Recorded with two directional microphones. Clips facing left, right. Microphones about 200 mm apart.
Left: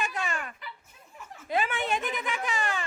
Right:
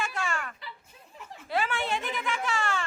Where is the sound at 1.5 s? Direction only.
20° left (ahead or behind).